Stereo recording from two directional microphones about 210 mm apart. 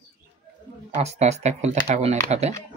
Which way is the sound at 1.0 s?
30° right (ahead or behind).